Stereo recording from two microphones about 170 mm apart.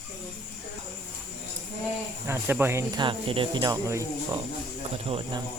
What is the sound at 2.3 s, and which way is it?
Speech, 15° right (ahead or behind).